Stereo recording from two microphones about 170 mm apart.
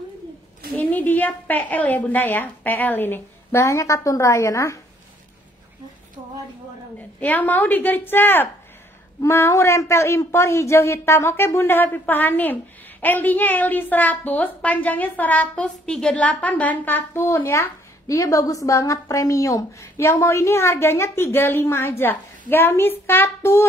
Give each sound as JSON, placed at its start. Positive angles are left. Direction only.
{"t": 0.7, "sound": "a woman's voice", "side_deg": 10}
{"t": 7.2, "sound": "a woman's voice", "side_deg": 10}